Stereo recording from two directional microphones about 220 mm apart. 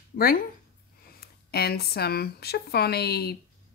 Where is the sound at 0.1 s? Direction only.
40° left (ahead or behind).